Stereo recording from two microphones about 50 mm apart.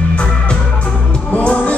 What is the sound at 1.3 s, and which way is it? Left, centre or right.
Music, left.